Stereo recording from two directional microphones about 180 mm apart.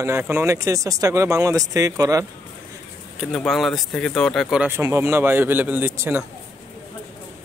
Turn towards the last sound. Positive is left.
turn(degrees=-10)  # may be behind; listen again after turning